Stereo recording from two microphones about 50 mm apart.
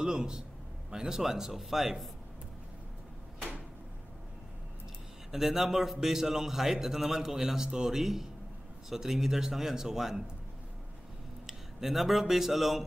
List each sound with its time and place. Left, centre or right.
0.0 s a man's voice: centre
5.3 s a man's voice: centre
11.4 s speech: centre